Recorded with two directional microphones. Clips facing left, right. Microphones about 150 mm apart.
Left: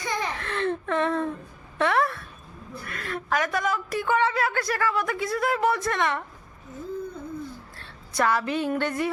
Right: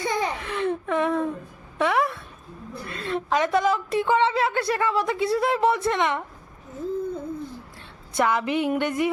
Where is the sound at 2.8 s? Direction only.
25° right (ahead or behind).